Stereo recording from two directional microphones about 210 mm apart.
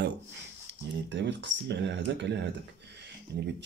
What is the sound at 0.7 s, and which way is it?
Speech, 55° right (ahead or behind).